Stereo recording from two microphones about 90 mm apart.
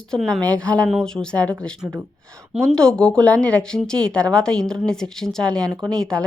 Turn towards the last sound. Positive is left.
turn(degrees=10)  # may be behind; listen again after turning